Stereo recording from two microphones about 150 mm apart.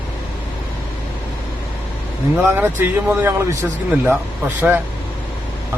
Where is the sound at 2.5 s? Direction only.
15° right (ahead or behind).